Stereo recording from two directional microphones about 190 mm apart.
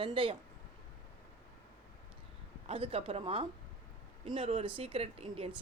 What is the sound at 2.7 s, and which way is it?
A man's voice, 30° right (ahead or behind).